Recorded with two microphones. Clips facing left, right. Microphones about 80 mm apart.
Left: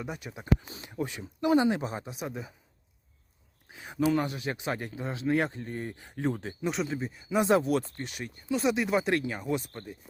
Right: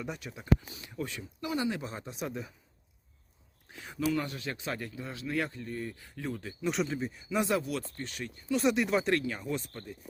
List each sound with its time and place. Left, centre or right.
0.0 s speech: centre
3.7 s a sound: centre
4.2 s speech: centre
6.1 s speech: left
6.4 s speech: left
6.7 s speech: centre
7.3 s speech: left
8.0 s speech: centre
8.5 s speech: centre
9.2 s speech: left